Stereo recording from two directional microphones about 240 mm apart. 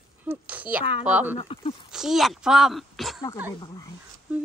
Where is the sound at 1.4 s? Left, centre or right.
Left.